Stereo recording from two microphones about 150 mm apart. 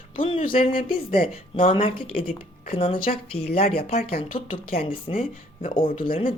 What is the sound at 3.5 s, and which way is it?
Speech, 40° left (ahead or behind).